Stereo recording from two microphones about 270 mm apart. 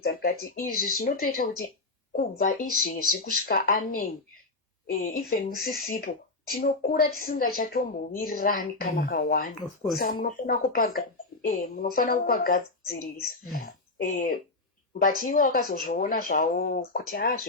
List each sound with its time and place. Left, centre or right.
0.0 s speech: left